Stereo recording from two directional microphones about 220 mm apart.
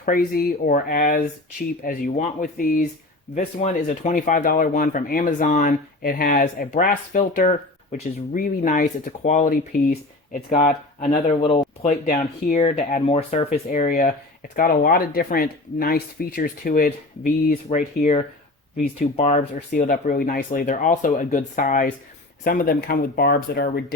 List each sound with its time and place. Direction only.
0.0 s speech: 40° left (ahead or behind)
11.4 s a sound: 25° left (ahead or behind)
12.0 s speech: 35° left (ahead or behind)